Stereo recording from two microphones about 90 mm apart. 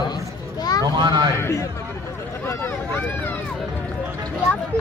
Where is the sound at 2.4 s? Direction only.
25° left (ahead or behind).